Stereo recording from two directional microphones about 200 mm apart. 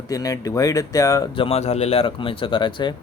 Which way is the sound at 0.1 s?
15° left (ahead or behind).